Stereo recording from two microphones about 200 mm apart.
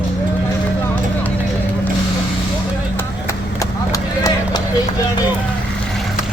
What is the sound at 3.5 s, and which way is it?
Clip-clop, 15° left (ahead or behind).